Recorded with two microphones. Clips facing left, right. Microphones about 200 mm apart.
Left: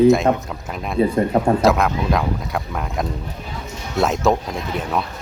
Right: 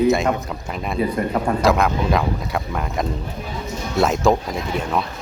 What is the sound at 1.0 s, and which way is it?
Speech, 25° left (ahead or behind).